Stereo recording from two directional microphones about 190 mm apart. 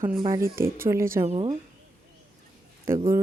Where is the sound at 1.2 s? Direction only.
35° right (ahead or behind).